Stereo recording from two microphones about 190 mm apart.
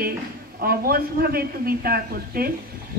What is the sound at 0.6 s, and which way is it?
A man's voice, 50° right (ahead or behind).